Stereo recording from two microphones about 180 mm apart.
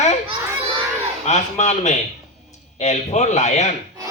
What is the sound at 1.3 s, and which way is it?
A man's voice, 40° left (ahead or behind).